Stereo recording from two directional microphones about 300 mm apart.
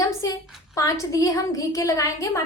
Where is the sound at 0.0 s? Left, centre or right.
Centre.